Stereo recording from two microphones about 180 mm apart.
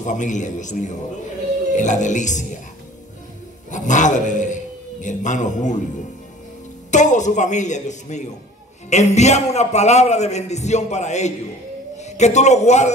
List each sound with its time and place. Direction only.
0.0 s a man's voice: 45° left (ahead or behind)
3.7 s a man's voice: 45° left (ahead or behind)
6.9 s a man's voice: 45° left (ahead or behind)